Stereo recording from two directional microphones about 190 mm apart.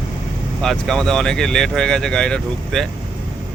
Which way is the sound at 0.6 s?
5° left (ahead or behind).